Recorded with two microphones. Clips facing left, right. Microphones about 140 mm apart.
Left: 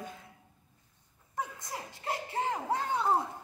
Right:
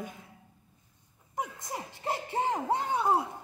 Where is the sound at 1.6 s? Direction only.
25° right (ahead or behind).